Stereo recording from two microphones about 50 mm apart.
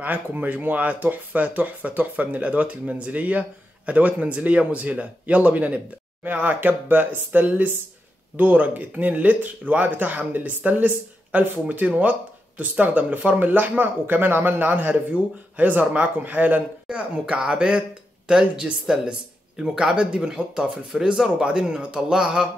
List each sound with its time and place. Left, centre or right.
0.0 s speech: right
16.8 s speech: centre